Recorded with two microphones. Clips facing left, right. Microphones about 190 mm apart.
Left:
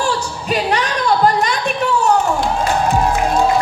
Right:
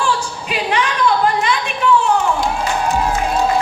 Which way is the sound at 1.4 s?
40° left (ahead or behind).